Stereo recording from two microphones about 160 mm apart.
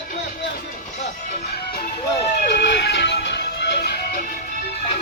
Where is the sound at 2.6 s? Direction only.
90° left.